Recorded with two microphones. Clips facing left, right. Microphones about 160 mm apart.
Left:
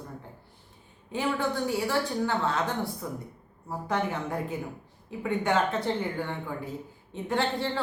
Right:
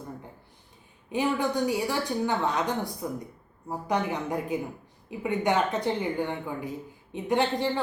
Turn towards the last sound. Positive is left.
turn(degrees=-15)  # may be behind; listen again after turning